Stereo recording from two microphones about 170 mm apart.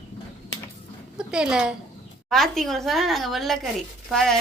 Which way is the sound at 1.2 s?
5° right (ahead or behind).